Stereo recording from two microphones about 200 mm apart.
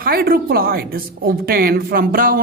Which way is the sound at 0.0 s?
50° right (ahead or behind).